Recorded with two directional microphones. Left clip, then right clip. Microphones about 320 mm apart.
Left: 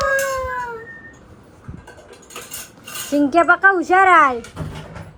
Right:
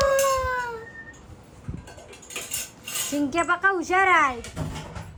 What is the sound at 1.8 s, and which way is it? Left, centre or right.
Vehicle, centre.